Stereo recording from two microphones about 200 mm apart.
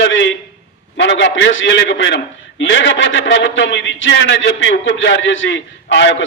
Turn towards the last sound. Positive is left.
turn(degrees=70)  # may be behind; listen again after turning